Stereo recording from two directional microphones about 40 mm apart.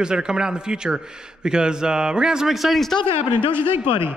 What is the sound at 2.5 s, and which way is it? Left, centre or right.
Speech, centre.